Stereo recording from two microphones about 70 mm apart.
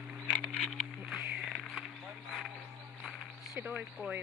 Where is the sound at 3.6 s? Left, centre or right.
Centre.